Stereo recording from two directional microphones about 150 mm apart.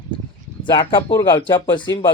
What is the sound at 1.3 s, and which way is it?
Speech, 30° left (ahead or behind).